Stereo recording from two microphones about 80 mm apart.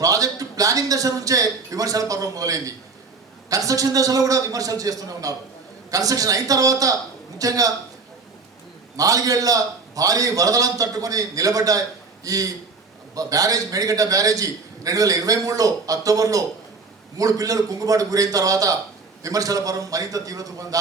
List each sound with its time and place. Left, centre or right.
0.0 s a man's voice: right
9.0 s a man's voice: right